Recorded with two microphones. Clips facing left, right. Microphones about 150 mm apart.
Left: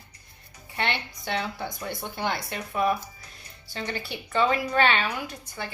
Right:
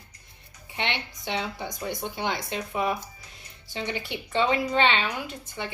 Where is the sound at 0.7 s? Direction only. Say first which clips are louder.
Left 2 dB; 20° right (ahead or behind).